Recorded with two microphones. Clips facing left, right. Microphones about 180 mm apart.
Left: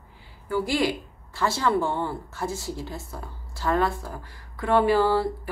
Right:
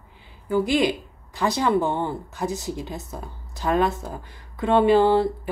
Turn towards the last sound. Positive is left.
turn(degrees=-20)  # may be behind; listen again after turning